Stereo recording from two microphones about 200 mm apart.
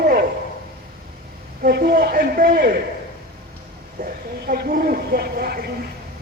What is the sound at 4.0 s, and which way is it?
A man's voice, 50° right (ahead or behind).